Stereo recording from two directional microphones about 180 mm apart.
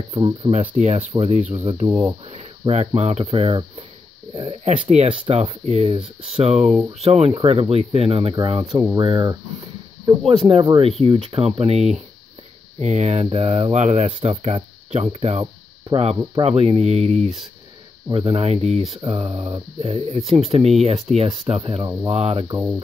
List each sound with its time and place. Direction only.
0.1 s speech: 30° right (ahead or behind)
22.5 s speech: 10° right (ahead or behind)